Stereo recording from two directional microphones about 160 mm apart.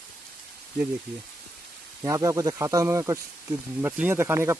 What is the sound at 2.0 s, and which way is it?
Speech, 20° right (ahead or behind).